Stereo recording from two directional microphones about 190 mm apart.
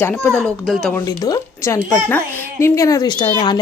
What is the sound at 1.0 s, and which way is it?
A child's voice, 20° left (ahead or behind).